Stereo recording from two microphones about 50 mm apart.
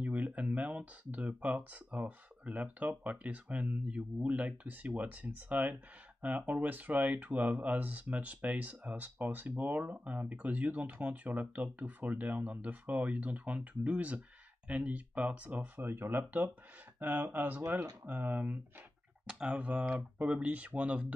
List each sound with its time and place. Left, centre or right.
0.0 s speech: right
19.2 s speech: centre
19.5 s speech: right